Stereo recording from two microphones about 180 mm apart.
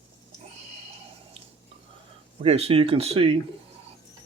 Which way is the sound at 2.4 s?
35° right (ahead or behind).